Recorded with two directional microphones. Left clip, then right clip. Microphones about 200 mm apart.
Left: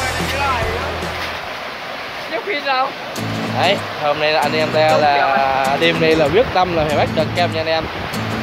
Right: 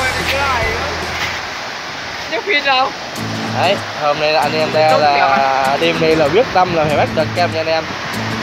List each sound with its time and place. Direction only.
2.5 s speech: 50° right (ahead or behind)
4.2 s speech: centre (ahead or behind)